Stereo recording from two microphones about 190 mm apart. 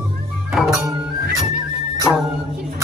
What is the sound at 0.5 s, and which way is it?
Music, centre (ahead or behind).